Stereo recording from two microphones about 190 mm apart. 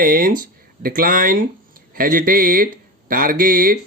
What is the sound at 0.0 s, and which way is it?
Speech, 50° right (ahead or behind).